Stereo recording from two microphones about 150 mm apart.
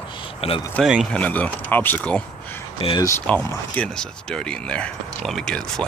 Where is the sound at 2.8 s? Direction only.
40° left (ahead or behind).